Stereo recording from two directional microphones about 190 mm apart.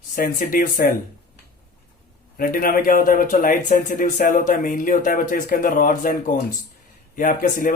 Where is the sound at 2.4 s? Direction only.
50° left (ahead or behind).